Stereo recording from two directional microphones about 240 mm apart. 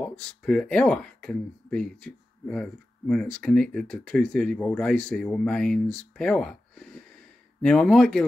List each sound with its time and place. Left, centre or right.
0.0 s speech: centre